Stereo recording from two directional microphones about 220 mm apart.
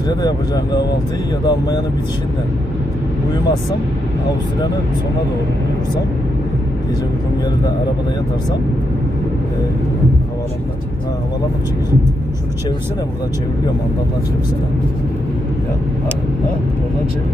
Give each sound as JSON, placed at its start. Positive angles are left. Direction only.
{"t": 0.1, "sound": "speech", "side_deg": 20}